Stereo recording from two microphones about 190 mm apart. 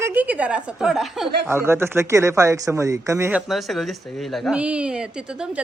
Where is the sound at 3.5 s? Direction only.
Centre (ahead or behind).